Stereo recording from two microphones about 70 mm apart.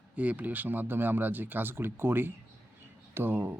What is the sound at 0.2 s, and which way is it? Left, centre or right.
A man's voice, right.